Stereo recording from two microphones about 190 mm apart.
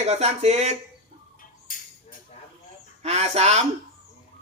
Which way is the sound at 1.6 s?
45° left (ahead or behind).